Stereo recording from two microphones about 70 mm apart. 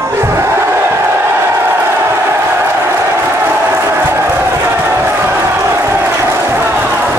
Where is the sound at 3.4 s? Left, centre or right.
Right.